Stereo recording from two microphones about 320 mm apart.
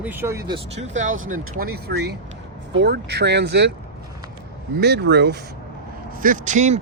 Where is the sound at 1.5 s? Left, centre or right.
Right.